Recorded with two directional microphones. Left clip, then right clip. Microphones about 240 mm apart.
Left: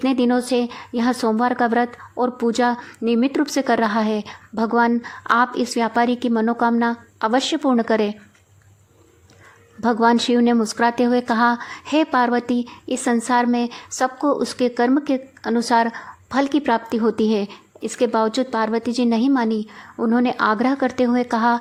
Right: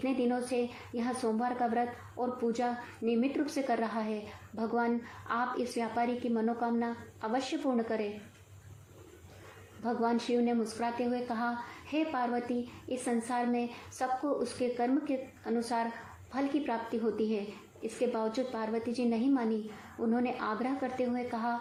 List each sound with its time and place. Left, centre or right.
0.0 s speech: left
9.8 s speech: left